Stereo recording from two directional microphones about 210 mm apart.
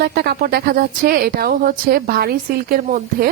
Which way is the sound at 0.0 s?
50° right (ahead or behind).